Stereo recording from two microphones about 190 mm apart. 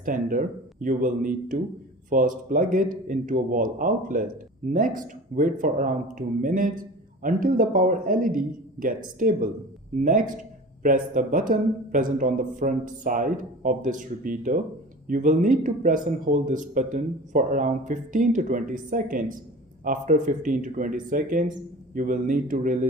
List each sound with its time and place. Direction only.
0.0 s speech: 45° right (ahead or behind)